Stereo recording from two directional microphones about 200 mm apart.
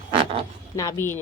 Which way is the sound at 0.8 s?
15° left (ahead or behind).